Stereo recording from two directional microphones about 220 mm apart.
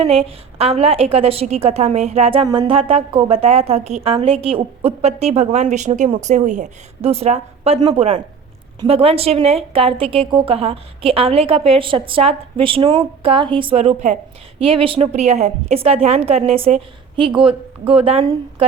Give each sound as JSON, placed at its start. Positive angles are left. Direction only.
{"t": 0.0, "sound": "a woman's voice", "side_deg": -25}